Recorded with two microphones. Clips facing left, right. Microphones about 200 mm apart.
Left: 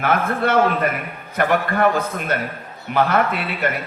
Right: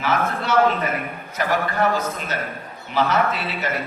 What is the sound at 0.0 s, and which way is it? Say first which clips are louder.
A man's voice: left 3 dB; 55° left (ahead or behind).